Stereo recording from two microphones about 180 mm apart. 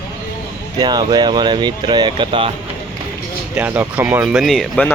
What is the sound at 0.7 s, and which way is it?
Speech, 25° right (ahead or behind).